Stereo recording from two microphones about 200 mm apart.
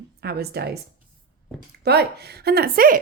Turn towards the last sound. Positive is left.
turn(degrees=-45)  # may be behind; listen again after turning